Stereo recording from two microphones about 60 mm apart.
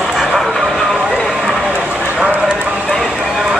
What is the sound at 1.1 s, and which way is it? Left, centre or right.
Run, centre.